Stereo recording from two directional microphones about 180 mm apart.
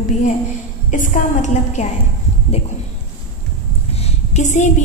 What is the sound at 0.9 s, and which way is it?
Speech, 45° left (ahead or behind).